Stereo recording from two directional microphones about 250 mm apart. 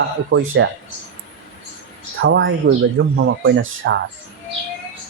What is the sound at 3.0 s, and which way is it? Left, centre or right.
Speech, right.